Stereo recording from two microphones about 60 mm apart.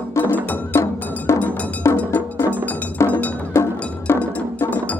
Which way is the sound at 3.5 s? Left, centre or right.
Left.